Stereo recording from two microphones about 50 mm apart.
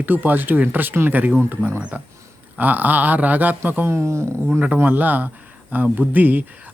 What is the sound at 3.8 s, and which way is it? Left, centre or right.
Speech, right.